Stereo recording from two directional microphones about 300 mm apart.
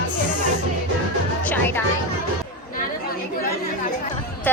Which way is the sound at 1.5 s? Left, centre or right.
Centre.